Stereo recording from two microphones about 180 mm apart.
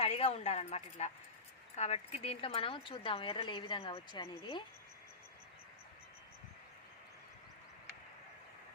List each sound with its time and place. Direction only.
0.0 s speech: 35° left (ahead or behind)